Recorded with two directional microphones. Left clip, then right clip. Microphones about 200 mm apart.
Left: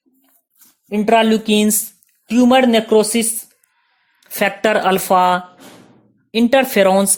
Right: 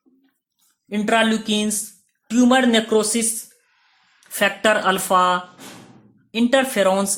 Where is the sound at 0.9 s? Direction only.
30° left (ahead or behind).